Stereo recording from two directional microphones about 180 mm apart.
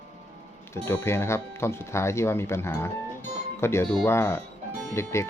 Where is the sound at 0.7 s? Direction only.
15° left (ahead or behind).